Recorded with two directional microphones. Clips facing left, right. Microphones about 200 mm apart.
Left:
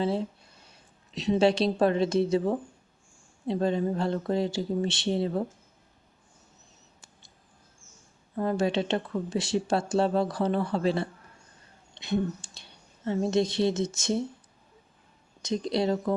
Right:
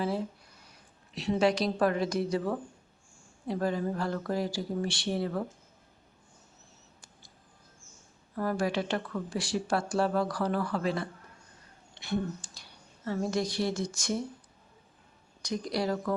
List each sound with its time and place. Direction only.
0.0 s speech: 25° left (ahead or behind)
8.4 s a woman's voice: 25° left (ahead or behind)
15.4 s speech: 25° left (ahead or behind)